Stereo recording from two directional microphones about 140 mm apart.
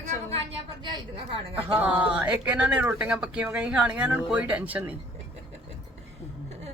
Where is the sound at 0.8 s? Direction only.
35° right (ahead or behind).